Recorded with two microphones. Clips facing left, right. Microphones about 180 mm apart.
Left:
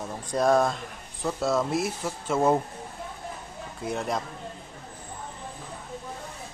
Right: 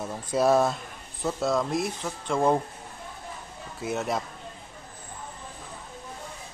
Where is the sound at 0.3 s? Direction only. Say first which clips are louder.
Even; 5° right (ahead or behind).